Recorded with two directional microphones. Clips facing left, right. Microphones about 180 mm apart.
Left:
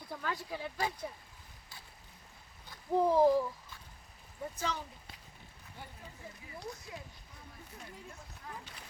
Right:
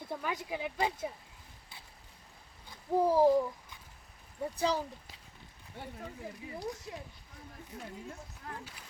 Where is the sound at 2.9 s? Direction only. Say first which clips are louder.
Right 1 dB; 10° right (ahead or behind).